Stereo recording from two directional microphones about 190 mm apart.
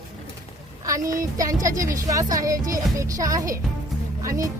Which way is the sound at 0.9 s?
15° right (ahead or behind).